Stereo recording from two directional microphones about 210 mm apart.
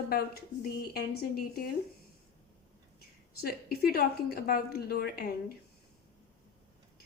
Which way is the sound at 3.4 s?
45° left (ahead or behind).